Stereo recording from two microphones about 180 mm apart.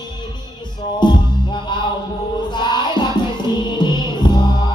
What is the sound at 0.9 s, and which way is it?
Music, 25° left (ahead or behind).